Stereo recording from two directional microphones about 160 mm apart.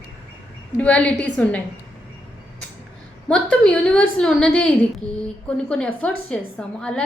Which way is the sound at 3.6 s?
5° left (ahead or behind).